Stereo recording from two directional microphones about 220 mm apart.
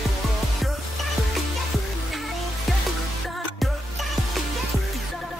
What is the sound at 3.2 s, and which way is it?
Music, centre (ahead or behind).